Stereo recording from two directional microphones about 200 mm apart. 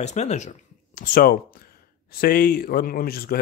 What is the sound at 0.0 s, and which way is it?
Speech, 35° left (ahead or behind).